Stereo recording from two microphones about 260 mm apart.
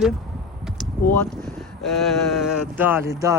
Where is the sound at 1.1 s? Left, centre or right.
Centre.